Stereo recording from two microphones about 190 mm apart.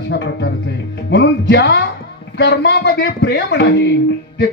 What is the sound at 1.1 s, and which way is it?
Music, 65° left (ahead or behind).